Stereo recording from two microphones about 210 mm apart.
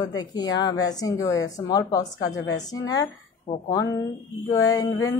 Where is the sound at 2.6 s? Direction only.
15° left (ahead or behind).